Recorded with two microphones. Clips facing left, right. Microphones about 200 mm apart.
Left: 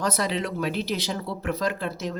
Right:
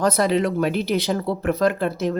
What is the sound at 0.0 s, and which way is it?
Speech, 55° right (ahead or behind).